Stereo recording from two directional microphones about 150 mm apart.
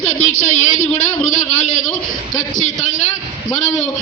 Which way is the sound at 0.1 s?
55° left (ahead or behind).